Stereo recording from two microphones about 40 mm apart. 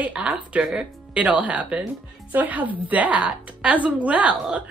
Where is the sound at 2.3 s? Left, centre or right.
Right.